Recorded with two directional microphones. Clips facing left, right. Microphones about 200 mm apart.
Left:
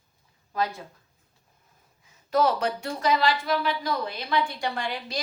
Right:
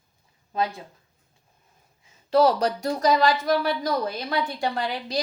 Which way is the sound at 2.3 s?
35° right (ahead or behind).